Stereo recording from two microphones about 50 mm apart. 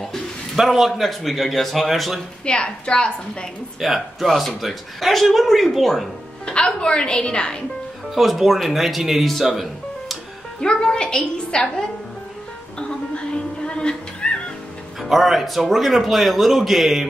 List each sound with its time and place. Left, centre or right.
0.0 s a man's voice: centre
2.4 s a woman's voice: left
3.8 s speech: centre
6.4 s a woman's voice: centre
8.1 s speech: centre
10.6 s a woman's voice: centre
13.7 s music: centre
15.0 s speech: centre